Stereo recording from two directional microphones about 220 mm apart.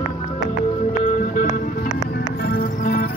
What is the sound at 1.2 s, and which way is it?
Music, 40° left (ahead or behind).